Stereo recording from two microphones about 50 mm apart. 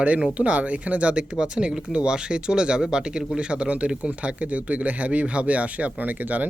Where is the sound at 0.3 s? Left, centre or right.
Right.